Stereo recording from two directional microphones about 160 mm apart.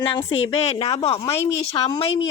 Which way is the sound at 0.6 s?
40° left (ahead or behind).